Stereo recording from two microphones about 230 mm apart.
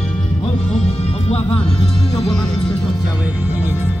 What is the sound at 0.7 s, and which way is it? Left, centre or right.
Music, left.